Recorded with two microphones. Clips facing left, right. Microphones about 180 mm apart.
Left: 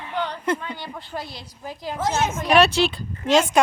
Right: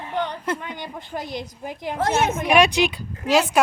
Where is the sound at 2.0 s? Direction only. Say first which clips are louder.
Right 2 dB; 60° right (ahead or behind).